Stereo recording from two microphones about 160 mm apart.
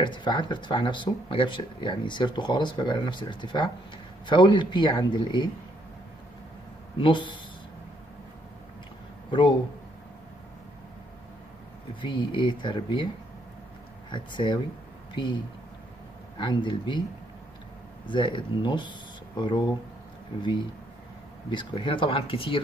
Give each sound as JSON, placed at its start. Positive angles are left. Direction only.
{"t": 0.0, "sound": "speech", "side_deg": 30}
{"t": 7.0, "sound": "speech", "side_deg": 30}
{"t": 9.3, "sound": "speech", "side_deg": 30}
{"t": 11.9, "sound": "speech", "side_deg": 30}
{"t": 14.1, "sound": "speech", "side_deg": 30}
{"t": 18.0, "sound": "speech", "side_deg": 30}
{"t": 21.5, "sound": "speech", "side_deg": 30}